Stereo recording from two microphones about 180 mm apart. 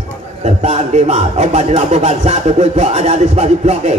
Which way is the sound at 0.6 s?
40° right (ahead or behind).